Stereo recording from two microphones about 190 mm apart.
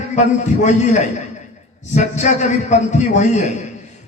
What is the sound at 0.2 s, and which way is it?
Speech, 40° left (ahead or behind).